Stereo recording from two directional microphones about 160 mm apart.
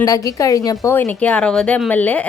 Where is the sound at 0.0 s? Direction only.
20° left (ahead or behind).